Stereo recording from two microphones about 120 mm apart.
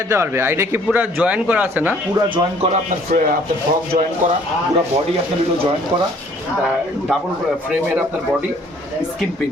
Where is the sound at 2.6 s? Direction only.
80° right.